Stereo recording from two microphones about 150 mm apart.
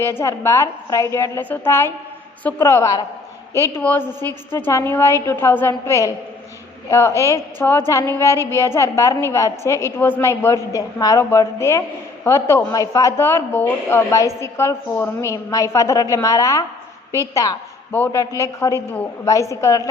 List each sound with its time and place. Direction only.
0.0 s a woman's voice: 15° left (ahead or behind)
7.2 s a woman's voice: 20° left (ahead or behind)